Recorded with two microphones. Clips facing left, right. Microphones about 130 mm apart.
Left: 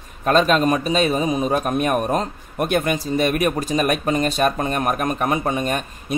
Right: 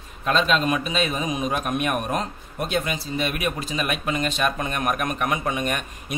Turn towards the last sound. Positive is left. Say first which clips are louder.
# left 4 dB
turn(degrees=35)  # may be behind; listen again after turning